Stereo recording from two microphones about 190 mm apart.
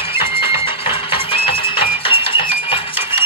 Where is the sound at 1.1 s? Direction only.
30° left (ahead or behind).